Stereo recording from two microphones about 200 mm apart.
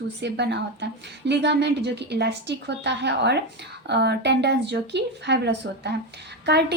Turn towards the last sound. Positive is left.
turn(degrees=-55)  # may be behind; listen again after turning